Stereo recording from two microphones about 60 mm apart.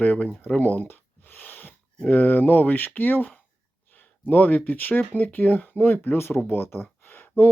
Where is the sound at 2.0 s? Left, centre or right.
Left.